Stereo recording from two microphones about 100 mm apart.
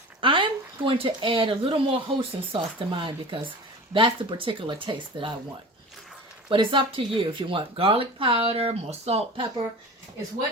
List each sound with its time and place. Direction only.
0.2 s speech: 60° right (ahead or behind)
6.5 s speech: 55° right (ahead or behind); by 9.2 s 90° right